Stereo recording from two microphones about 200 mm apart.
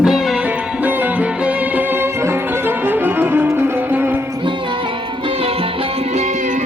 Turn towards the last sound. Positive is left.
turn(degrees=-35)  # may be behind; listen again after turning